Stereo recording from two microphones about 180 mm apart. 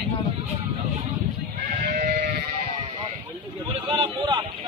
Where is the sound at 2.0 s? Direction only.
50° right (ahead or behind).